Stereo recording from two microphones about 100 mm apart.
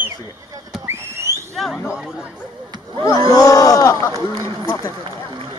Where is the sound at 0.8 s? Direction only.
25° right (ahead or behind).